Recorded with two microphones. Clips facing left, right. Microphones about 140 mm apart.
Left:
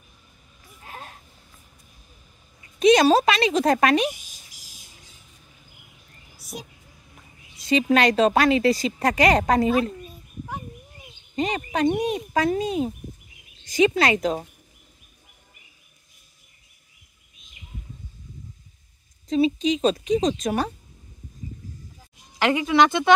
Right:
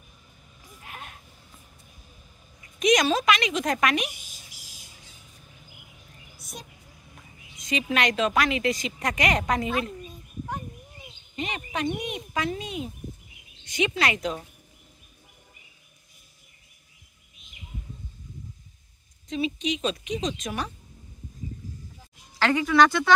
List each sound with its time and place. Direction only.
0.8 s a sound: 35° left (ahead or behind)
2.6 s a woman's voice: 30° left (ahead or behind)
7.5 s a woman's voice: 35° left (ahead or behind)
11.3 s a woman's voice: 35° left (ahead or behind)
19.2 s a woman's voice: 35° left (ahead or behind)
22.4 s speech: 20° left (ahead or behind)